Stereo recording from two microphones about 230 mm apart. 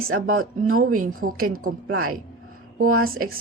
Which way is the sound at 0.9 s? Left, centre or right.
Right.